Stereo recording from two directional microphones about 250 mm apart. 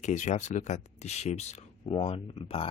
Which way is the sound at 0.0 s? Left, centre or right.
Left.